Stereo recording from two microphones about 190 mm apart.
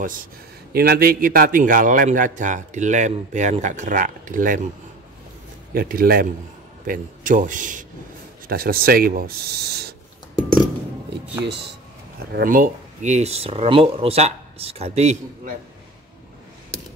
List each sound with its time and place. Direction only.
0.0 s a man's voice: 45° right (ahead or behind)
5.8 s a man's voice: 50° right (ahead or behind)
11.4 s speech: 65° right (ahead or behind)
12.3 s speech: 50° right (ahead or behind)